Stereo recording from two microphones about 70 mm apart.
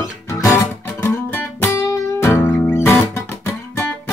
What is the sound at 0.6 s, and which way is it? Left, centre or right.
Music, left.